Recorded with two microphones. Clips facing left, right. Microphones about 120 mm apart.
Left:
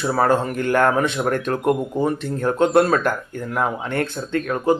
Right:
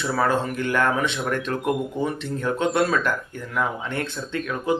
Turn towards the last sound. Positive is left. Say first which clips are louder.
# left 6 dB
turn(degrees=50)  # may be behind; listen again after turning